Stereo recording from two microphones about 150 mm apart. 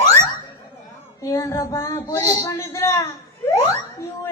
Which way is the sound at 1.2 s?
20° left (ahead or behind).